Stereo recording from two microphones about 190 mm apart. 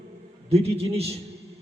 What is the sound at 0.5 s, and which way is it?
Speech, 30° right (ahead or behind).